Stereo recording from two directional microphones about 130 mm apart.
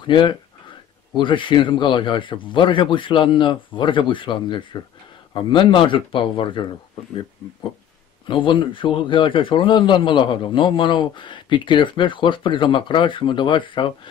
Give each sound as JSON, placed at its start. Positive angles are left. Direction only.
{"t": 0.0, "sound": "a man's voice", "side_deg": 35}
{"t": 8.5, "sound": "a man's voice", "side_deg": 40}